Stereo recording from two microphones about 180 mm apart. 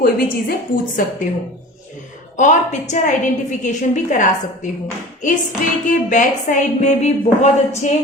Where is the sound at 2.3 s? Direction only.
45° left (ahead or behind).